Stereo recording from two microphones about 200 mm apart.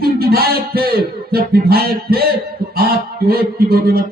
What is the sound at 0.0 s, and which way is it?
Music, 50° right (ahead or behind).